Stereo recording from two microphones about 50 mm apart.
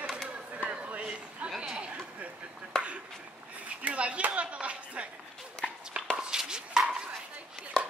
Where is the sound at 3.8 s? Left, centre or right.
Right.